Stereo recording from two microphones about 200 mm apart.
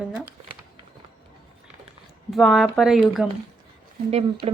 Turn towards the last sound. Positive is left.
turn(degrees=-30)  # may be behind; listen again after turning